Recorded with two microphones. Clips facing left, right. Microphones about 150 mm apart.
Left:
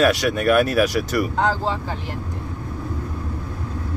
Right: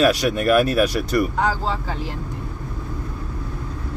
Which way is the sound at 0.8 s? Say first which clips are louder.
Right 1 dB; centre (ahead or behind).